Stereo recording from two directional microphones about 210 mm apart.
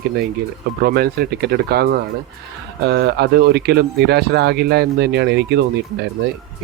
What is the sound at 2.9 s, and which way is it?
Speech, 50° right (ahead or behind).